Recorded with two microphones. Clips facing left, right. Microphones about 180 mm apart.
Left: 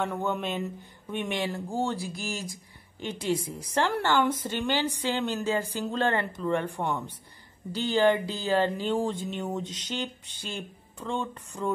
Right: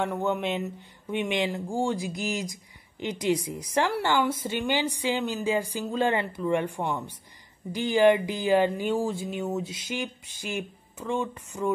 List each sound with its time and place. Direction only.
0.0 s speech: 10° right (ahead or behind)